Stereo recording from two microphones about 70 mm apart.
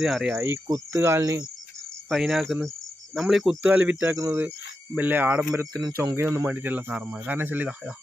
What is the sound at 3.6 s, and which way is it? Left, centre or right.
Speech, right.